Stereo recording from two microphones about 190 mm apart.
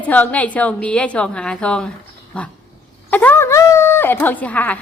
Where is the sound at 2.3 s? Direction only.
5° left (ahead or behind).